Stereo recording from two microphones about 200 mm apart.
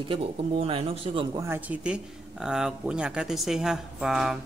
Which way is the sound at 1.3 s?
10° right (ahead or behind).